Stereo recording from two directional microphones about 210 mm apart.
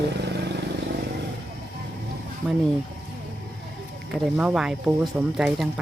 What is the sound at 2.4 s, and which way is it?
Speech, 5° right (ahead or behind).